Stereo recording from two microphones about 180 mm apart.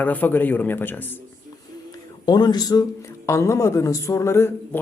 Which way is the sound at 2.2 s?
25° left (ahead or behind).